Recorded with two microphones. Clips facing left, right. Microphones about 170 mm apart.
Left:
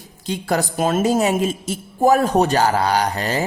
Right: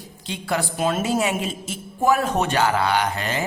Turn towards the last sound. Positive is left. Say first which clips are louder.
# left 3 dB
turn(degrees=40)  # may be behind; listen again after turning